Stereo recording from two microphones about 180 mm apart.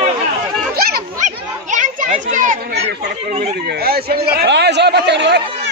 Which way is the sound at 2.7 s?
65° right (ahead or behind).